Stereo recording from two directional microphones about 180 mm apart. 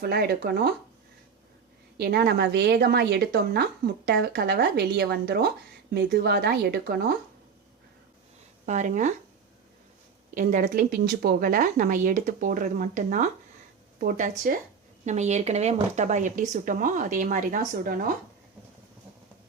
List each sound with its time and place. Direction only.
0.0 s a woman's voice: 60° right (ahead or behind)
2.0 s a woman's voice: 60° right (ahead or behind)
8.6 s a woman's voice: 40° right (ahead or behind)
10.3 s a woman's voice: 50° right (ahead or behind)